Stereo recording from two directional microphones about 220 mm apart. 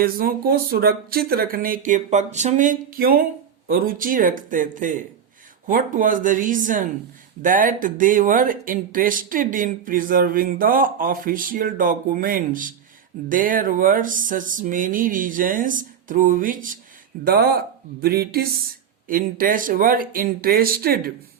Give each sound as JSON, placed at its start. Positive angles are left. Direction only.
{"t": 0.0, "sound": "speech", "side_deg": -40}